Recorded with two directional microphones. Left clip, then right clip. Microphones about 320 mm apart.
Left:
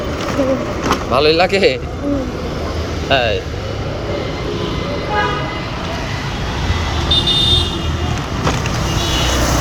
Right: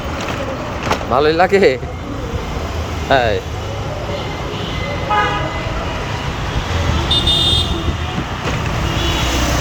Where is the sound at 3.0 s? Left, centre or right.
Right.